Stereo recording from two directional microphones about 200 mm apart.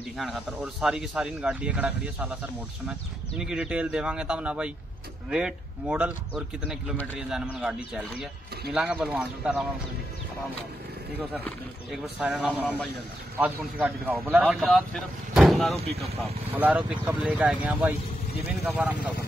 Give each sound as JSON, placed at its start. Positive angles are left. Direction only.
{"t": 0.2, "sound": "speech", "side_deg": 0}
{"t": 12.2, "sound": "speech", "side_deg": -5}
{"t": 15.8, "sound": "speech", "side_deg": -30}
{"t": 16.5, "sound": "speech", "side_deg": -10}